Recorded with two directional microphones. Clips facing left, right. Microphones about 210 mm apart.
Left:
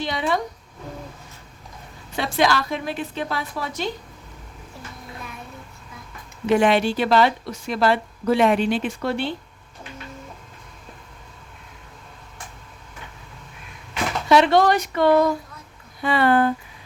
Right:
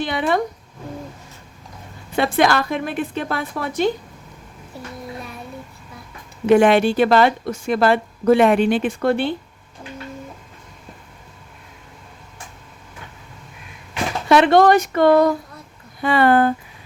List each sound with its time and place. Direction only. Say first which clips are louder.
0.0 s a woman's voice: right 4 dB; 55° right (ahead or behind)
2.1 s a woman's voice: right 4 dB; 55° right (ahead or behind)
6.4 s speech: right 5 dB; 55° right (ahead or behind)
14.3 s speech: right 3 dB; 55° right (ahead or behind)